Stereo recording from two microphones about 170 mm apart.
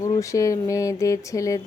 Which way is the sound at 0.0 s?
20° left (ahead or behind).